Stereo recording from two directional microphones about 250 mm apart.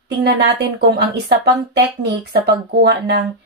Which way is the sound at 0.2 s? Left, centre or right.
Right.